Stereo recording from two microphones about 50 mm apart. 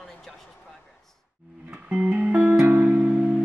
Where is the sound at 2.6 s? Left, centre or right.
Right.